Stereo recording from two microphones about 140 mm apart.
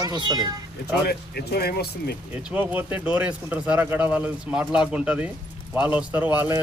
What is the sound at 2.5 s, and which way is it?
Speech, 15° right (ahead or behind).